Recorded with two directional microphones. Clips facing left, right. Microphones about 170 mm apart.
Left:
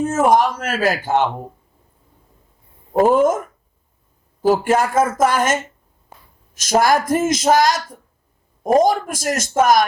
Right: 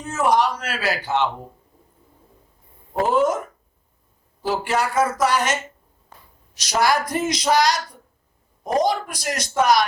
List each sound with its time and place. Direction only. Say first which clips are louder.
0.0 s a woman's voice: left 5 dB; 50° left (ahead or behind)
2.9 s a woman's voice: left 5 dB; 50° left (ahead or behind)
4.4 s a woman's voice: left 7 dB; 50° left (ahead or behind)